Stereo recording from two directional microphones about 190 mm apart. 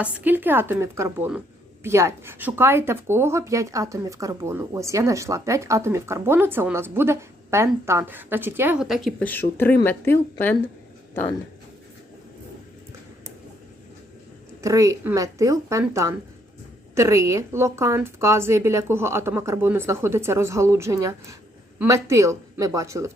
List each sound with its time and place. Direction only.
0.0 s a woman's voice: 10° right (ahead or behind); by 10.6 s 10° left (ahead or behind)
14.6 s a woman's voice: 15° right (ahead or behind)